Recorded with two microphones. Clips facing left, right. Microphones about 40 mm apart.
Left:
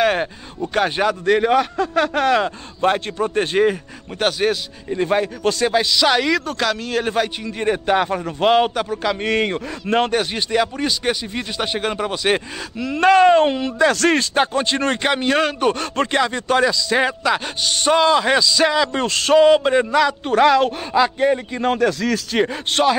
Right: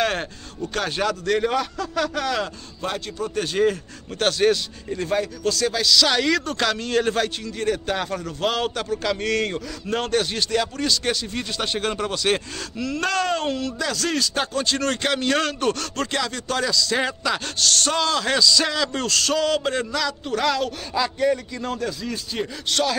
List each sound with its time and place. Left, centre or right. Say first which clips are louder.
0.0 s a sound: left 6 dB; centre
0.7 s speech: left 6 dB; left
4.2 s speech: even; centre
5.0 s speech: left 5 dB; left; by 7.1 s centre
7.1 s speech: left 2 dB; centre
8.7 s speech: left 3 dB; centre; by 10.1 s left
10.1 s speech: left 3 dB; centre
13.8 s speech: left 10 dB; left
22.0 s speech: left 9 dB; left
22.7 s speech: left 4 dB; left